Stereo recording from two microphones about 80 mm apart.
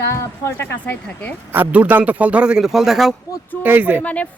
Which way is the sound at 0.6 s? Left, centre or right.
Left.